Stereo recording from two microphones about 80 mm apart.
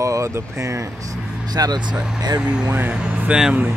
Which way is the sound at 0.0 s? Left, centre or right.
Right.